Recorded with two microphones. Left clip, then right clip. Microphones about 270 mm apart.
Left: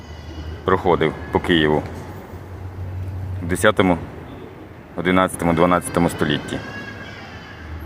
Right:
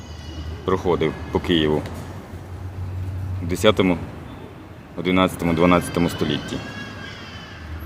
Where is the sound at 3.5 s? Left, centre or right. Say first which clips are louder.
Left 1 dB; centre.